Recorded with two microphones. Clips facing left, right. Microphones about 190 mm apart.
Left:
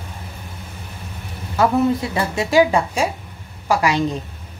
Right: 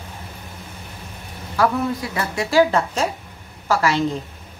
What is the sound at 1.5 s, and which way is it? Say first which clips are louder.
Speech: left 4 dB; 20° left (ahead or behind).